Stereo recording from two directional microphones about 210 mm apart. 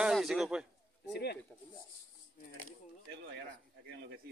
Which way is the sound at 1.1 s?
50° left (ahead or behind).